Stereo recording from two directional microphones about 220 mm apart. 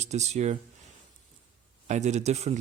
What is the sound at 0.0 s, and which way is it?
Speech, 30° right (ahead or behind).